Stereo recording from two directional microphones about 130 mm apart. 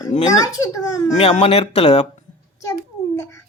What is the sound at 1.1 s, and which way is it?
Speech, 50° left (ahead or behind).